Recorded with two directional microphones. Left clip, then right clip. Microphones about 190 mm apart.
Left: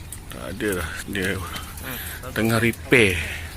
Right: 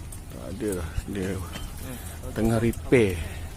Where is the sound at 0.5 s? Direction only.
Centre (ahead or behind).